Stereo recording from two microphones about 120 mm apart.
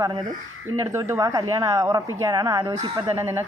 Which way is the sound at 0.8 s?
20° right (ahead or behind).